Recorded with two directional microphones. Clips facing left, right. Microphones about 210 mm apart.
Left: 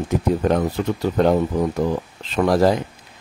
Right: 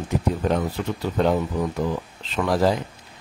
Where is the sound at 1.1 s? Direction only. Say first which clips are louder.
Left 4 dB; 45° left (ahead or behind).